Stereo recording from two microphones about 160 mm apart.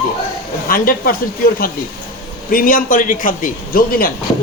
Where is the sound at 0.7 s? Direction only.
60° left (ahead or behind).